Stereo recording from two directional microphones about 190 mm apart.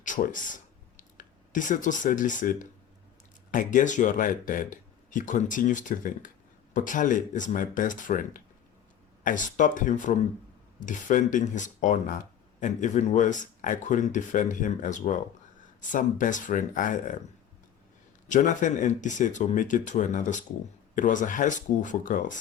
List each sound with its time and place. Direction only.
0.0 s a sound: 45° left (ahead or behind)
3.5 s speech: 45° left (ahead or behind)
18.3 s speech: 40° left (ahead or behind)